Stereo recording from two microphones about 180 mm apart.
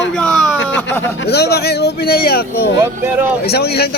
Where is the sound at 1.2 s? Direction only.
65° left (ahead or behind).